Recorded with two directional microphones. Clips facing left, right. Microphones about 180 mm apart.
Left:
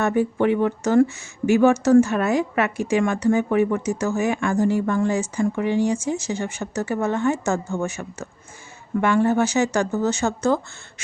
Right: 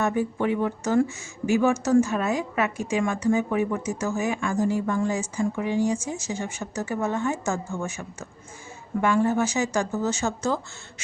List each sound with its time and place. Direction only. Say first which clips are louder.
0.0 s speech: left 4 dB; 65° left (ahead or behind)